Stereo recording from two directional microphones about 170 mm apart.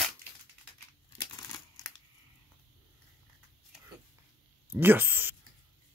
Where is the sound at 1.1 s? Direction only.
25° left (ahead or behind).